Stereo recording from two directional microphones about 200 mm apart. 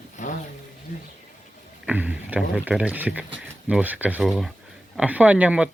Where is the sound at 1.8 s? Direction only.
10° right (ahead or behind).